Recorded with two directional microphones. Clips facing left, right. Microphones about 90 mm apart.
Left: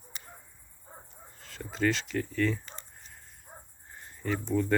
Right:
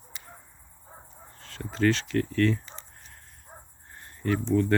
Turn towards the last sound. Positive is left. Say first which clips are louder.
# right 4 dB
turn(degrees=5)  # may be behind; listen again after turning